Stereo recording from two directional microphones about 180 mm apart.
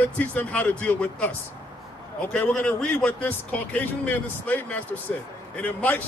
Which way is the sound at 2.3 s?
5° left (ahead or behind).